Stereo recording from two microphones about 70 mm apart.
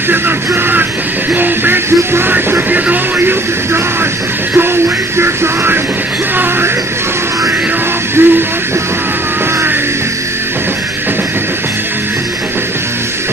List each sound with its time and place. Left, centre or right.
0.1 s music: right
8.2 s music: right